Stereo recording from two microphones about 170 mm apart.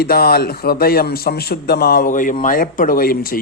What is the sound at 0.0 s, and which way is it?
A man's voice, 65° left (ahead or behind).